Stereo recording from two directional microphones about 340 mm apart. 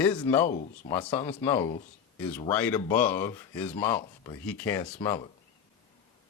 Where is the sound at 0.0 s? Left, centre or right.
Centre.